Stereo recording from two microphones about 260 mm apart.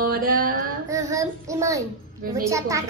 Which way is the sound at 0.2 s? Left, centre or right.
Right.